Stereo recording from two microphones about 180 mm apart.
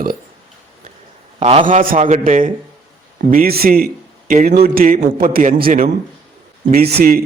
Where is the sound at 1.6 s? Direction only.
50° right (ahead or behind).